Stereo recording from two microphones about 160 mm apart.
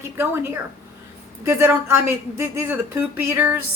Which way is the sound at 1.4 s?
15° right (ahead or behind).